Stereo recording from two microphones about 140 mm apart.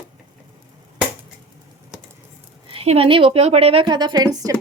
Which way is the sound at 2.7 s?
45° right (ahead or behind).